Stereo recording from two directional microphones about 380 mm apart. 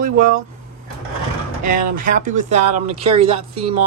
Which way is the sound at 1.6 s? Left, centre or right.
Right.